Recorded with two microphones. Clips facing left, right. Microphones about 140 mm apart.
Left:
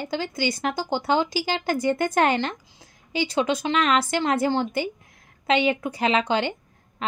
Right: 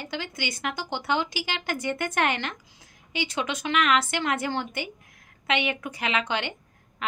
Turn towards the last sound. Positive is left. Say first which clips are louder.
# left 3 dB
turn(degrees=35)  # may be behind; listen again after turning